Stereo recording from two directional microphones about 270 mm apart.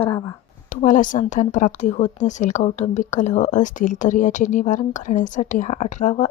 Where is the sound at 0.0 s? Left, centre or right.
Centre.